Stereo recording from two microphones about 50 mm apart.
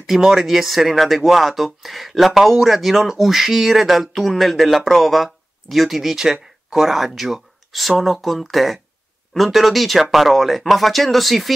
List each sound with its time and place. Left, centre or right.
0.0 s speech: centre